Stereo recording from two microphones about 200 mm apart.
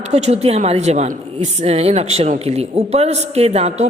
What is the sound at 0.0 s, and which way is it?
A woman's voice, 35° right (ahead or behind).